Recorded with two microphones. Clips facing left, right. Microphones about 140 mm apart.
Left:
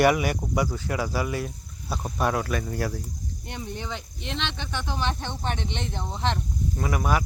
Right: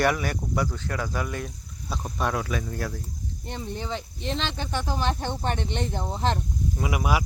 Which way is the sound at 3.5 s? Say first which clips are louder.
Right 2 dB; 35° right (ahead or behind).